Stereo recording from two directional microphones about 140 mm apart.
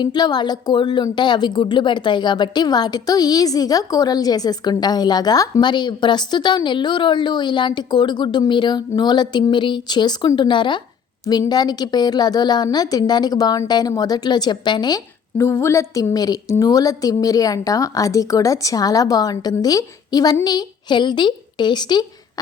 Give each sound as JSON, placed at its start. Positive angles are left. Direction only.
{"t": 0.0, "sound": "a woman's voice", "side_deg": 30}